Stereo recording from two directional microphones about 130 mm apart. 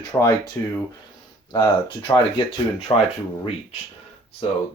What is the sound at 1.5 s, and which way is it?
Speech, 30° left (ahead or behind).